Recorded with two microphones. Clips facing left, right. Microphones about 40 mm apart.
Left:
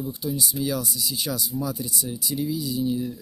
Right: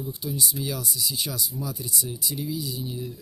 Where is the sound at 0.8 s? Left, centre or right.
Centre.